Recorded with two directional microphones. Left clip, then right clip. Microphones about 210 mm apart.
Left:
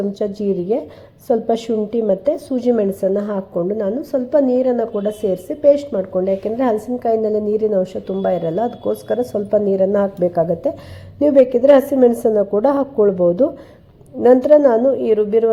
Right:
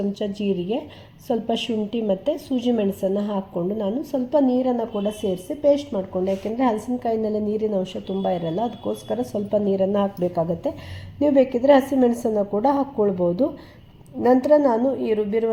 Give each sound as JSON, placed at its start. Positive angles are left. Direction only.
{"t": 0.1, "sound": "a woman's voice", "side_deg": 15}